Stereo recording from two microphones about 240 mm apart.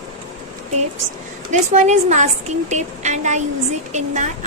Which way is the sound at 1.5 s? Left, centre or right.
Right.